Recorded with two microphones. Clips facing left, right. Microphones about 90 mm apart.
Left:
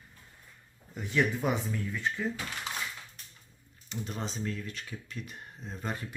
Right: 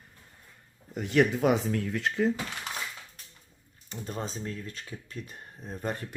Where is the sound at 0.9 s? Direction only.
70° right (ahead or behind); by 2.3 s 90° right.